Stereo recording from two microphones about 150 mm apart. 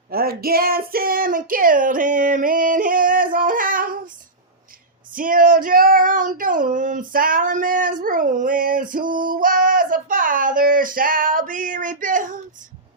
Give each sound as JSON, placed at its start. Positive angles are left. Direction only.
{"t": 0.1, "sound": "child singing", "side_deg": -90}
{"t": 5.1, "sound": "female singing", "side_deg": -65}